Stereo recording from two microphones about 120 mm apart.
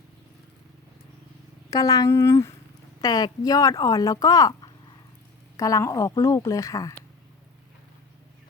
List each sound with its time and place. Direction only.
1.7 s a woman's voice: 30° left (ahead or behind)
3.0 s a woman's voice: 35° left (ahead or behind)